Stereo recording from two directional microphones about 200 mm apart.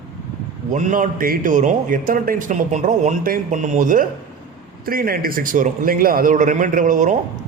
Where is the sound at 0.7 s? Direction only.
40° right (ahead or behind).